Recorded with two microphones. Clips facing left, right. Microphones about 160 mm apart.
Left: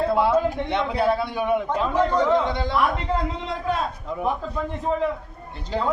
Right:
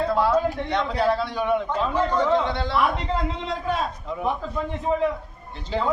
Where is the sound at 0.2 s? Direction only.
20° left (ahead or behind).